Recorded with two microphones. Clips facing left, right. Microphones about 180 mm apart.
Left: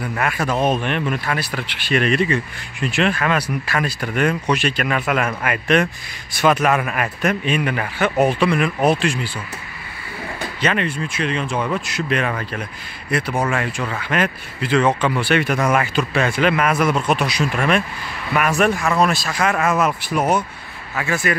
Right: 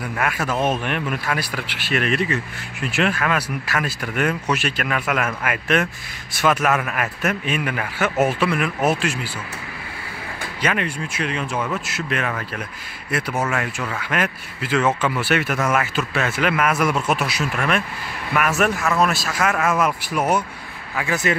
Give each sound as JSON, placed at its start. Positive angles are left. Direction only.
{"t": 0.2, "sound": "speech", "side_deg": -5}
{"t": 10.6, "sound": "speech", "side_deg": -10}